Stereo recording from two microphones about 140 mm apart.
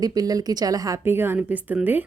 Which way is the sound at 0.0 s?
25° right (ahead or behind).